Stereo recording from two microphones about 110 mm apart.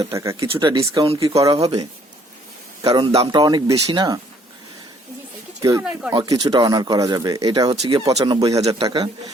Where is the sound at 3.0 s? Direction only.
65° right (ahead or behind).